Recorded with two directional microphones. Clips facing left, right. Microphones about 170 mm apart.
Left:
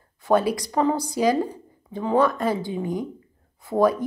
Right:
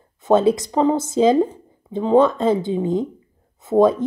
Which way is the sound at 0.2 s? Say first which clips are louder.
Right 5 dB; 25° right (ahead or behind).